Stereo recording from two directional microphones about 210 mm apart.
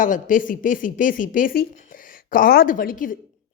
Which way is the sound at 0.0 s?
40° left (ahead or behind).